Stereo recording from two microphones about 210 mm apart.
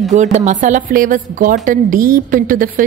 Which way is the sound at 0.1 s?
35° right (ahead or behind).